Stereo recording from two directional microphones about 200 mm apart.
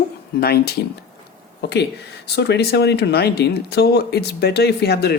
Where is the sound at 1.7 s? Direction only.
55° left (ahead or behind).